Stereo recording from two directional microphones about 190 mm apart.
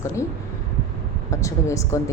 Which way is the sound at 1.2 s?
15° left (ahead or behind).